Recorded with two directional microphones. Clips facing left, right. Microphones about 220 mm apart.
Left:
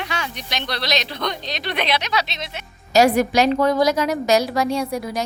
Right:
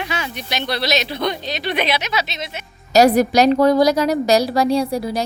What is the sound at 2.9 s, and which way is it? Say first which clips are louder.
A woman's voice: right 3 dB; 40° right (ahead or behind).